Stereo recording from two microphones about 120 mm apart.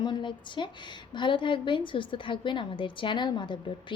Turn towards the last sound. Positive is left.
turn(degrees=40)  # may be behind; listen again after turning